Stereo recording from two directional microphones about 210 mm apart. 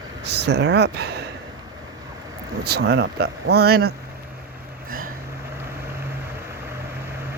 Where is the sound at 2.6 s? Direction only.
50° right (ahead or behind).